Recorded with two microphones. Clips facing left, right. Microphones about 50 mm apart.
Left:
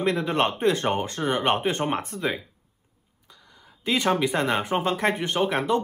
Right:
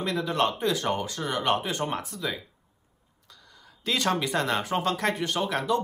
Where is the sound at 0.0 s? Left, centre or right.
Left.